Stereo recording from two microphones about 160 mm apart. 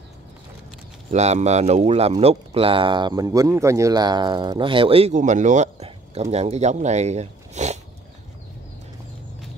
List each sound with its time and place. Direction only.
1.1 s speech: 45° right (ahead or behind)